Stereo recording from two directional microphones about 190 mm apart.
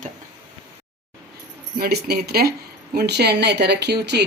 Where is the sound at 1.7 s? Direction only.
55° right (ahead or behind).